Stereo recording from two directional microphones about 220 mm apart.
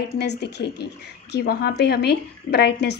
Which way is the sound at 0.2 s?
50° left (ahead or behind).